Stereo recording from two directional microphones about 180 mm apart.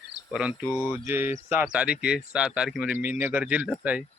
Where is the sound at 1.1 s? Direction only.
10° right (ahead or behind).